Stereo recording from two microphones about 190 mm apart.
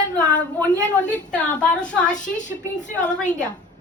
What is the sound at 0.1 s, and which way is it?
A woman's voice, 5° left (ahead or behind).